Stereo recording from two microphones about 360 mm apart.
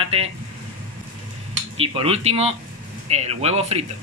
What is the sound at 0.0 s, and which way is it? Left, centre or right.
Vehicle, centre.